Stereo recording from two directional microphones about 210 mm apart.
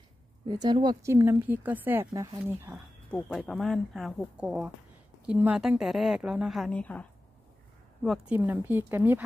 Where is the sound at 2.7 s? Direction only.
5° left (ahead or behind).